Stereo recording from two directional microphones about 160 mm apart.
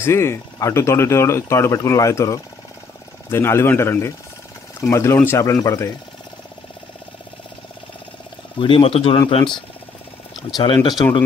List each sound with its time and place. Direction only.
0.0 s speech: 15° left (ahead or behind)
8.5 s speech: 35° left (ahead or behind)
10.6 s speech: 30° left (ahead or behind)